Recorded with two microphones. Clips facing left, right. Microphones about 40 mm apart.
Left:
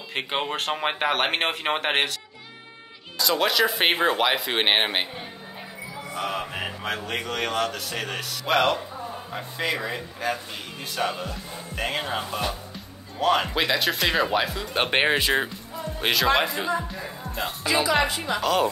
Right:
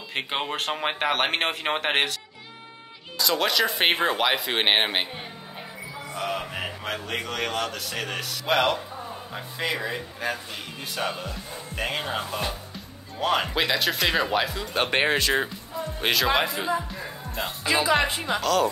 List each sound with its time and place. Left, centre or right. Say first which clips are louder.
0.1 s speech: left 1 dB; centre
3.2 s speech: left 1 dB; centre
6.1 s speech: left 1 dB; centre
18.4 s speech: even; centre